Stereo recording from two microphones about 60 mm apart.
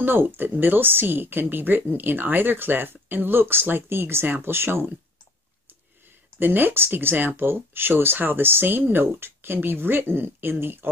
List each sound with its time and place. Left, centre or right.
0.0 s speech: right
6.4 s speech: right